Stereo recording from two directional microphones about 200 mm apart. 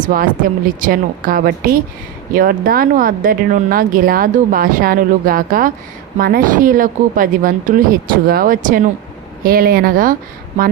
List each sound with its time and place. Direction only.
0.1 s a woman's voice: 45° right (ahead or behind)